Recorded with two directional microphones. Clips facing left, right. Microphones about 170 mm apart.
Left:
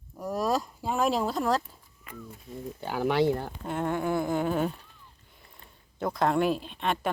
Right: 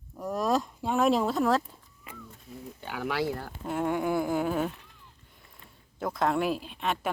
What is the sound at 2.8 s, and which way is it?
Speech, 30° left (ahead or behind).